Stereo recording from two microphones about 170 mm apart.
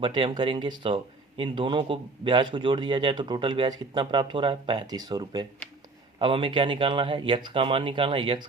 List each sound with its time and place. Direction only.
0.0 s a man's voice: 30° right (ahead or behind)